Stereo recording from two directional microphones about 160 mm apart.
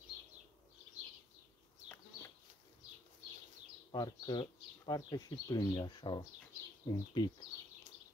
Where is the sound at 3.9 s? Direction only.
25° left (ahead or behind).